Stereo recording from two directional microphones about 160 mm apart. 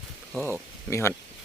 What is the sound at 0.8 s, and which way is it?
Speech, 15° left (ahead or behind).